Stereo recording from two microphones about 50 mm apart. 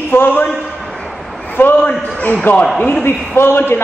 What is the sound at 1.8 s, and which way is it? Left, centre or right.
A man's voice, left.